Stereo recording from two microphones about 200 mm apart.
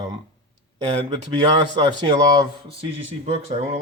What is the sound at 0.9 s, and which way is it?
Speech, 30° right (ahead or behind).